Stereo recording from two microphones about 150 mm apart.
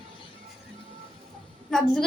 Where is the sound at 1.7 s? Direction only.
5° left (ahead or behind).